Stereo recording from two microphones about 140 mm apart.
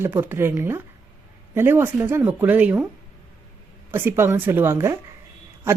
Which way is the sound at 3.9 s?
15° right (ahead or behind).